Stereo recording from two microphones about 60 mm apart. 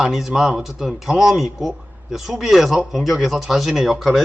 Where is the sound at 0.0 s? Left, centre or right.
Centre.